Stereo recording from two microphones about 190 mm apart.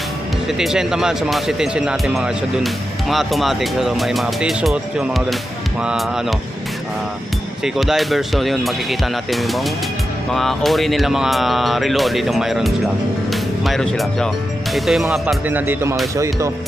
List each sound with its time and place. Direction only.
0.4 s speech: centre (ahead or behind)
7.6 s speech: centre (ahead or behind)